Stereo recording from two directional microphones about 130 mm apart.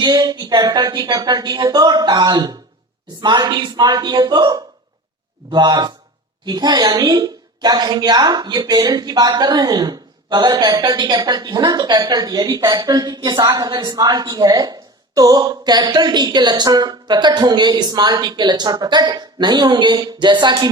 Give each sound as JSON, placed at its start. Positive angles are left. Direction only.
{"t": 0.0, "sound": "a woman's voice", "side_deg": -30}